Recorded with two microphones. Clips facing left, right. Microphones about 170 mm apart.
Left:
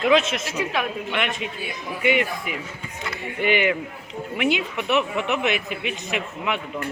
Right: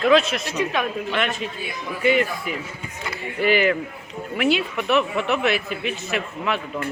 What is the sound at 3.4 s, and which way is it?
Speech, 20° left (ahead or behind).